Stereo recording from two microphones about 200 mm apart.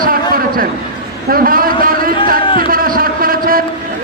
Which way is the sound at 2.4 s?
25° left (ahead or behind).